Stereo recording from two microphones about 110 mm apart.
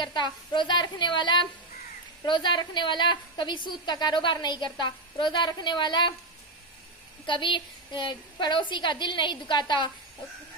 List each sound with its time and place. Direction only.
0.0 s a woman's voice: 40° left (ahead or behind)
7.2 s a woman's voice: 45° left (ahead or behind)